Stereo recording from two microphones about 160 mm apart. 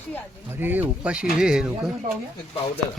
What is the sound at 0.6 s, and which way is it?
Speech, 10° right (ahead or behind).